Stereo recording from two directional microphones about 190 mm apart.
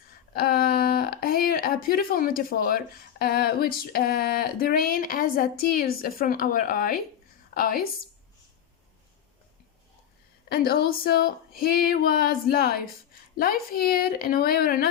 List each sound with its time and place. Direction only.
0.3 s speech: 50° left (ahead or behind)
10.5 s speech: 55° left (ahead or behind)